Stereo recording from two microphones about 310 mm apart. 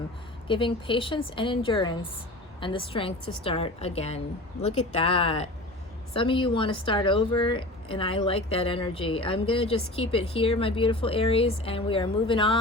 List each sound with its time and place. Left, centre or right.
0.4 s a woman's voice: centre